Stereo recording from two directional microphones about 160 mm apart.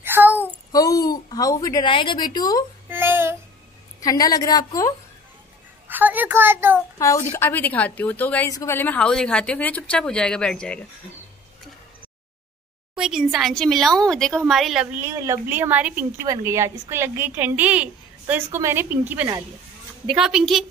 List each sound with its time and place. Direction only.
0.0 s child singing: 10° right (ahead or behind)
0.7 s a woman's voice: 20° left (ahead or behind)
2.9 s child singing: 15° right (ahead or behind)
4.0 s a woman's voice: 20° left (ahead or behind)
5.9 s a child's voice: 10° right (ahead or behind)
7.0 s a woman's voice: 15° left (ahead or behind)
12.9 s speech: 5° right (ahead or behind)
15.0 s a woman's voice: 20° right (ahead or behind); by 20.6 s 5° right (ahead or behind)